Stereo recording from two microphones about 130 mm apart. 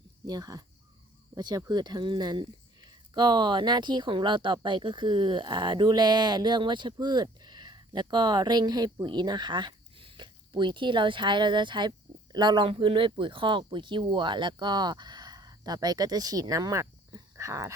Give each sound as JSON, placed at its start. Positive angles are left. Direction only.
{"t": 0.3, "sound": "speech", "side_deg": -30}